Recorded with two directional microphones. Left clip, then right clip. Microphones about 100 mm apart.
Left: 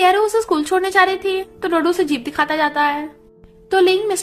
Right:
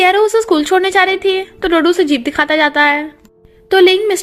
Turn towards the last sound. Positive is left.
turn(degrees=-40)  # may be behind; listen again after turning